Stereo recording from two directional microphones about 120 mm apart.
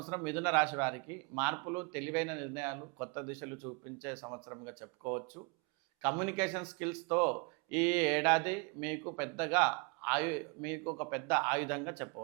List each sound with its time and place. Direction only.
0.0 s speech: 15° right (ahead or behind)